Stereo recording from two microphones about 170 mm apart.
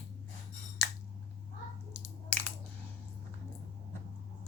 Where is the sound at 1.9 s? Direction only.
10° left (ahead or behind).